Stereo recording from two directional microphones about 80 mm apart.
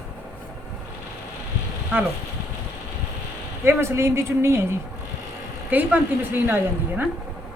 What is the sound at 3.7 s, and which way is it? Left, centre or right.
A man's voice, right.